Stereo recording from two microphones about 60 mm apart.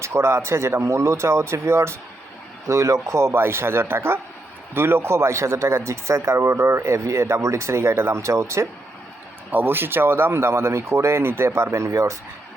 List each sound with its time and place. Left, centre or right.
0.0 s a man's voice: right
2.6 s a man's voice: right
9.5 s a man's voice: right